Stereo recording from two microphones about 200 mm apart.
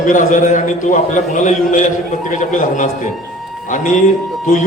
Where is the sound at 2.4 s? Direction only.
40° left (ahead or behind).